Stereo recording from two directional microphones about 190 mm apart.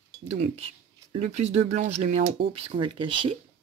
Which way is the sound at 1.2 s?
35° right (ahead or behind).